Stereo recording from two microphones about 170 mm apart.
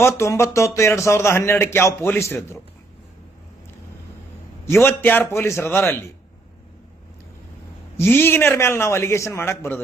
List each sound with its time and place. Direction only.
0.2 s speech: 15° left (ahead or behind)
4.6 s speech: 15° left (ahead or behind)
7.9 s speech: 15° left (ahead or behind)